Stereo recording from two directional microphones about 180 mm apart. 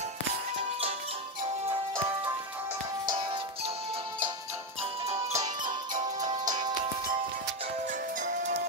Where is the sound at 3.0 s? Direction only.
30° right (ahead or behind).